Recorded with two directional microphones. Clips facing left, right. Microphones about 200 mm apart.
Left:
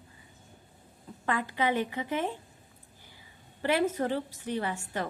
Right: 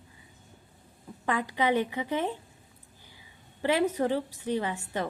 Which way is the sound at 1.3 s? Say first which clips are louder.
Right 2 dB; 15° right (ahead or behind).